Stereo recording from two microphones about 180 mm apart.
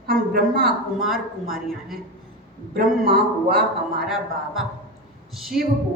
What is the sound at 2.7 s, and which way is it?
Speech, 55° right (ahead or behind).